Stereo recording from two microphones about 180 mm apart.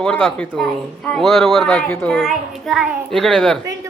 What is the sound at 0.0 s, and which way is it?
Speech, 5° left (ahead or behind).